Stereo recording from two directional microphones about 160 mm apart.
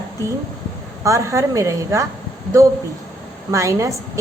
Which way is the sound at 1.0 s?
20° right (ahead or behind).